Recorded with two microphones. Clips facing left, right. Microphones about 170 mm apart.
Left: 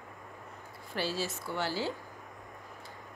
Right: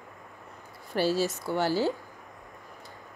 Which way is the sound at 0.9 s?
40° right (ahead or behind).